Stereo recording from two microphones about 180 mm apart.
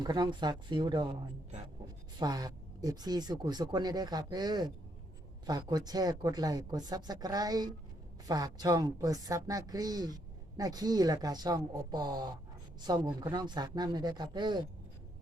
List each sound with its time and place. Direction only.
0.0 s speech: 25° right (ahead or behind)
2.1 s speech: 20° right (ahead or behind)